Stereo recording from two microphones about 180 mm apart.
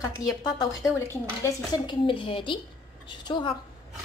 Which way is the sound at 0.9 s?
15° left (ahead or behind).